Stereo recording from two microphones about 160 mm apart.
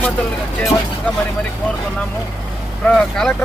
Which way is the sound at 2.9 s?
5° left (ahead or behind).